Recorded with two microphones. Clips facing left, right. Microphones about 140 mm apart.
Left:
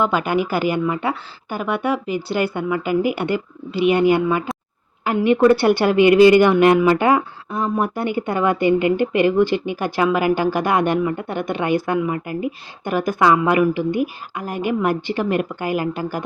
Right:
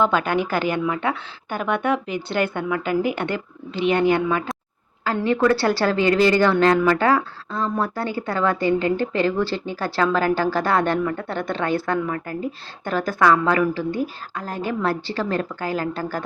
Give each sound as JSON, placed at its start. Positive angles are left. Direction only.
{"t": 0.0, "sound": "a woman's voice", "side_deg": 10}